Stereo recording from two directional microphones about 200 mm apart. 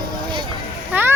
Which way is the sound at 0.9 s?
10° right (ahead or behind).